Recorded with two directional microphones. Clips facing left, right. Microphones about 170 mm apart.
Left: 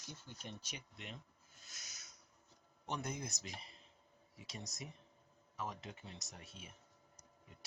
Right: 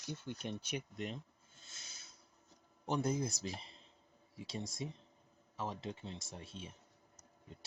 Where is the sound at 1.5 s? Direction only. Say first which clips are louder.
Left 1 dB; 25° right (ahead or behind).